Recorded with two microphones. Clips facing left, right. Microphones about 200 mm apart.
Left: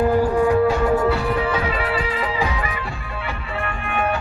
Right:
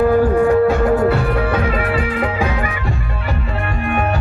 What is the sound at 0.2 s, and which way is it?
Music, 55° right (ahead or behind).